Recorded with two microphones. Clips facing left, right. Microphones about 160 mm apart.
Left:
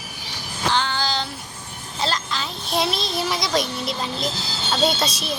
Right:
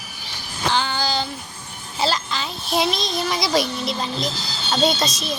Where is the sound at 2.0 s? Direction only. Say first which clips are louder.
Right 3 dB; 5° right (ahead or behind).